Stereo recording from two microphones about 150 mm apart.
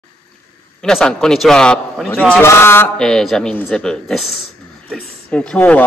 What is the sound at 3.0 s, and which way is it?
Speech, 5° left (ahead or behind).